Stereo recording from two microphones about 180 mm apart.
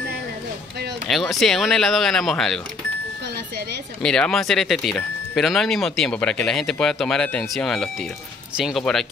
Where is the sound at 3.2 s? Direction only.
65° right (ahead or behind).